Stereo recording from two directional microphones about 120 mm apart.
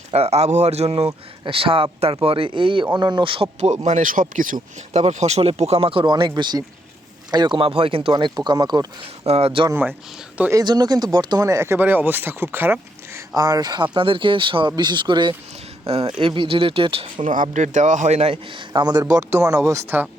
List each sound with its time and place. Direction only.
0.1 s speech: 60° right (ahead or behind); by 4.5 s 90° right
4.9 s speech: 70° right (ahead or behind); by 7.6 s 35° right (ahead or behind)
7.6 s speech: 50° right (ahead or behind); by 8.9 s 35° right (ahead or behind)
9.2 s speech: 55° right (ahead or behind)
9.6 s speech: 20° right (ahead or behind)
10.5 s speech: 35° right (ahead or behind); by 13.2 s 15° right (ahead or behind)
13.3 s speech: 30° right (ahead or behind)
15.9 s speech: 55° right (ahead or behind)
17.2 s speech: 90° right; by 19.2 s 35° right (ahead or behind)
19.9 s speech: 15° right (ahead or behind)